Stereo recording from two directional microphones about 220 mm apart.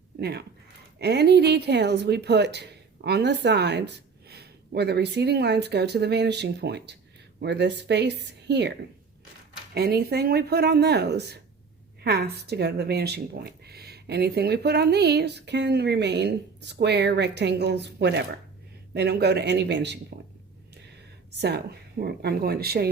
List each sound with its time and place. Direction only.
0.2 s speech: 45° right (ahead or behind)
9.7 s speech: 45° right (ahead or behind)
21.4 s speech: 45° right (ahead or behind)